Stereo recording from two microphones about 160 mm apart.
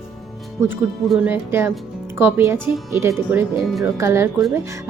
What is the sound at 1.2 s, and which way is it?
Speech, 15° right (ahead or behind).